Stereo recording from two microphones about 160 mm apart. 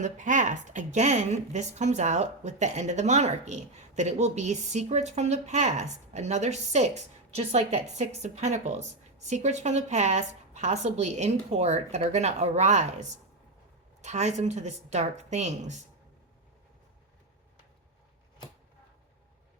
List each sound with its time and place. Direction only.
0.0 s a woman's voice: 50° right (ahead or behind)